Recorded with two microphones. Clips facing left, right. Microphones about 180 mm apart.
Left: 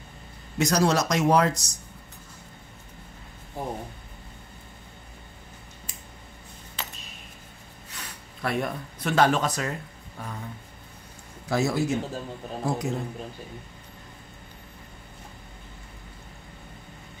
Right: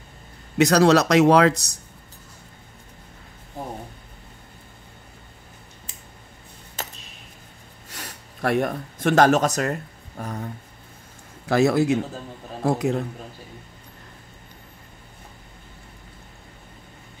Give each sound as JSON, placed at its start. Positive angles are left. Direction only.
{"t": 0.6, "sound": "speech", "side_deg": -65}
{"t": 6.8, "sound": "a sound", "side_deg": -45}
{"t": 7.9, "sound": "speech", "side_deg": -45}
{"t": 11.4, "sound": "a man's voice", "side_deg": -65}